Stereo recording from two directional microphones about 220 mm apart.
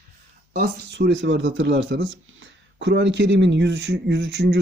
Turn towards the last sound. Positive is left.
turn(degrees=-50)  # may be behind; listen again after turning